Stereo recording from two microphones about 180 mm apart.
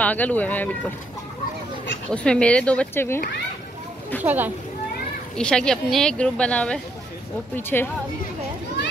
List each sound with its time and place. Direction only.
0.0 s speech: 10° left (ahead or behind)
2.0 s speech: 5° left (ahead or behind)
4.2 s speech: 10° right (ahead or behind)
5.3 s speech: 5° left (ahead or behind)